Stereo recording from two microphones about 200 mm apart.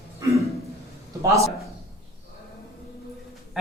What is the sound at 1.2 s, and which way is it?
Speech, 15° right (ahead or behind).